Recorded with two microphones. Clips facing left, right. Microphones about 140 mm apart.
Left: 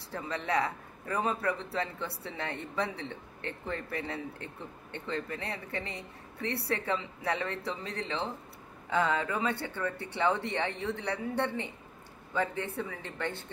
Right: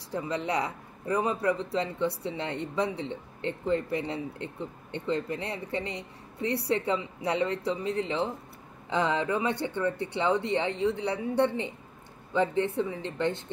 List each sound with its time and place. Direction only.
0.1 s a man's voice: 20° right (ahead or behind)
12.7 s a man's voice: 20° right (ahead or behind)